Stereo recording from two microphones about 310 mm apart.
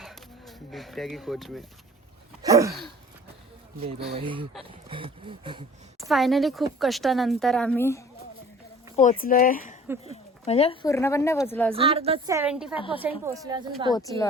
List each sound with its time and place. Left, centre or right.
0.0 s a sound: centre
2.4 s a sound: centre
3.8 s a woman's voice: centre
6.0 s speech: centre
9.0 s speech: left; by 11.7 s centre
11.7 s a woman's voice: centre
13.9 s speech: centre